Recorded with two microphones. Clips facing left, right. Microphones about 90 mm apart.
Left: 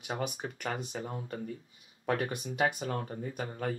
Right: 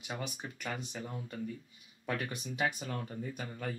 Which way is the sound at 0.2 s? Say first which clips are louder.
Left 5 dB; 45° left (ahead or behind).